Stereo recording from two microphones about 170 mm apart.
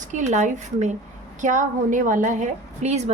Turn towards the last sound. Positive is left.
turn(degrees=-40)  # may be behind; listen again after turning